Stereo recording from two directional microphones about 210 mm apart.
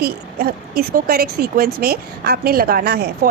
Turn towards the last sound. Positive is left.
turn(degrees=-50)  # may be behind; listen again after turning